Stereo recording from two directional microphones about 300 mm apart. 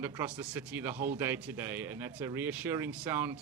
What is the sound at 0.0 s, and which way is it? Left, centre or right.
Speech, centre.